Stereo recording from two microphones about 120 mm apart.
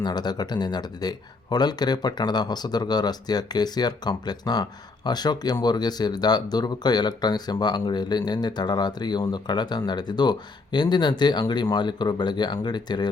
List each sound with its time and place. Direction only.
0.0 s speech: 35° left (ahead or behind)